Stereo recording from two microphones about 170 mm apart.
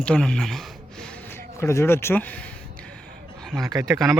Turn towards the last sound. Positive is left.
turn(degrees=-20)  # may be behind; listen again after turning